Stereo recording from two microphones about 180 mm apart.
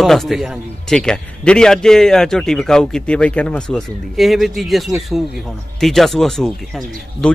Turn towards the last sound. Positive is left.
turn(degrees=5)  # may be behind; listen again after turning